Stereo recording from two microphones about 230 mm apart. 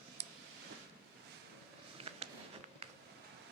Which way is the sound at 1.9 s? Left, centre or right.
Right.